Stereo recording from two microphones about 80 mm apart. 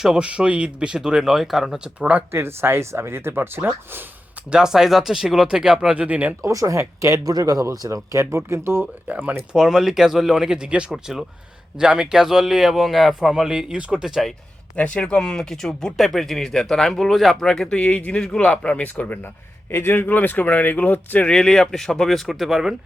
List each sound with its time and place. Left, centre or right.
0.0 s speech: centre
2.0 s speech: centre
2.3 s speech: right
4.5 s speech: centre
6.4 s speech: right
8.8 s speech: centre
9.5 s a man's voice: centre
14.8 s a man's voice: centre